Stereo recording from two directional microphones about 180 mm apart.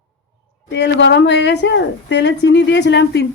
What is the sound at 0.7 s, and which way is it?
A woman's voice, 80° left.